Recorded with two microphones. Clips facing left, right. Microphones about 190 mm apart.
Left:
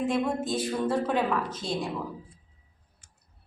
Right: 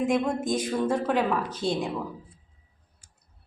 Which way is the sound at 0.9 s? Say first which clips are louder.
Right 1 dB; 10° right (ahead or behind).